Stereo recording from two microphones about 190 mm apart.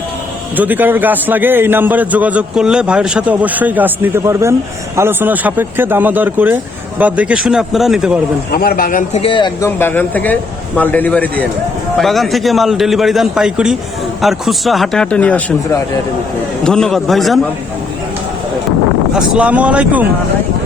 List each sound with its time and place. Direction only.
0.5 s a man's voice: 10° right (ahead or behind)
8.5 s speech: 50° left (ahead or behind)
9.2 s speech: 25° left (ahead or behind)
9.6 s a man's voice: 10° left (ahead or behind)
19.1 s a man's voice: 5° right (ahead or behind)